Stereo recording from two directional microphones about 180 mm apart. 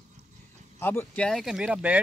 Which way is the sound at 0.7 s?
10° left (ahead or behind).